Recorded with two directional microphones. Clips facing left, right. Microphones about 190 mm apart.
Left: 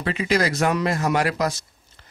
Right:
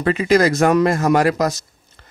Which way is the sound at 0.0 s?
45° right (ahead or behind).